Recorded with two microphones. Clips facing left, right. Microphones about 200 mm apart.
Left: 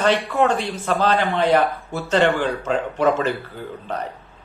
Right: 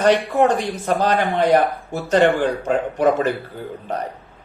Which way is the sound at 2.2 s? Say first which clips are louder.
Right 3 dB; 15° right (ahead or behind).